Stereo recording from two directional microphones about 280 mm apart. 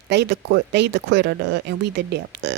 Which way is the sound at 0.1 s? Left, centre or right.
Right.